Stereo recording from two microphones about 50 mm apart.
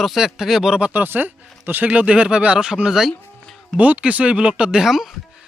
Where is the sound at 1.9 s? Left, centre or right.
Right; by 3.1 s centre.